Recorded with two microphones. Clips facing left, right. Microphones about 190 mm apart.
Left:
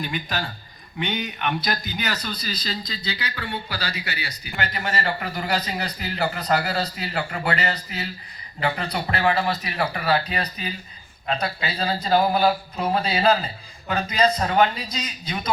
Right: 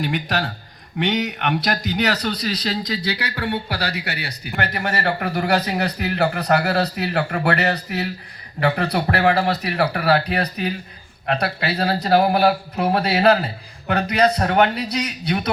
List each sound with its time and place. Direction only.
0.0 s speech: 70° right (ahead or behind)